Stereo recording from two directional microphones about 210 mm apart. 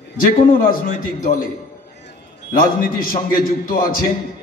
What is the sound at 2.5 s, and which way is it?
A man's voice, 45° left (ahead or behind).